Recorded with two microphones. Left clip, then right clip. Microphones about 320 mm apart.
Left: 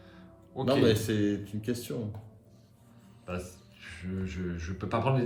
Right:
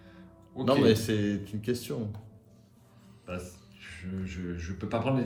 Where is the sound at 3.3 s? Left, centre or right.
Centre.